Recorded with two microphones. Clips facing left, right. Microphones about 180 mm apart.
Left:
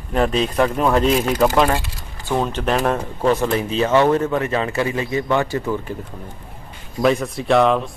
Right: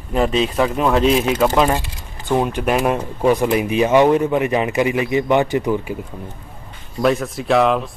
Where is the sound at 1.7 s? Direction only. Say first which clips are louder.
Right 1 dB; 20° right (ahead or behind).